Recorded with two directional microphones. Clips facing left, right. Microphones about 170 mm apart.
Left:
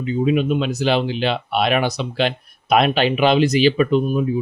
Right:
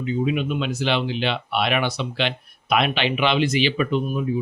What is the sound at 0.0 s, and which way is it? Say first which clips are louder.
Speech: left 4 dB; 40° left (ahead or behind).